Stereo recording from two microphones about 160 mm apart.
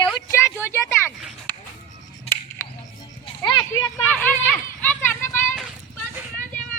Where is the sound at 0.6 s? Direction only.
15° left (ahead or behind).